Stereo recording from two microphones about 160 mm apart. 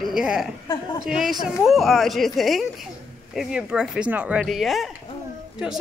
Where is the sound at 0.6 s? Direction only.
25° left (ahead or behind).